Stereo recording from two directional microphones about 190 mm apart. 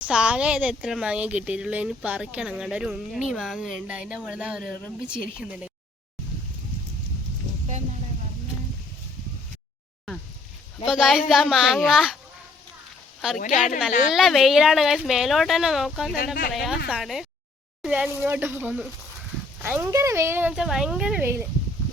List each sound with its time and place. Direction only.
0.0 s speech: 5° right (ahead or behind)
10.8 s speech: centre (ahead or behind)
13.4 s a woman's voice: 40° left (ahead or behind)
14.1 s speech: centre (ahead or behind)
16.1 s speech: 50° left (ahead or behind)
16.9 s speech: centre (ahead or behind)